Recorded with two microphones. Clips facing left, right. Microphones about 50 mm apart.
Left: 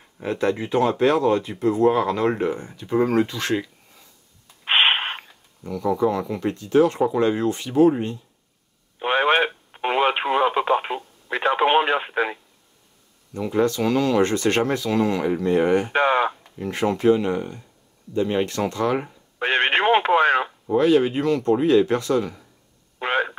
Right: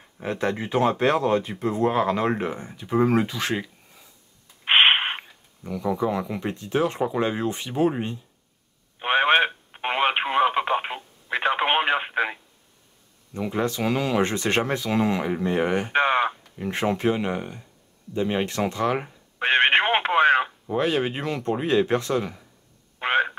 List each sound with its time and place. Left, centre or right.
0.2 s speech: right
4.6 s a sound: right
5.7 s speech: centre
9.0 s radio: right
13.3 s speech: centre
15.9 s a sound: right
16.5 s speech: centre
19.4 s radio: right
20.7 s speech: right
22.9 s radio: right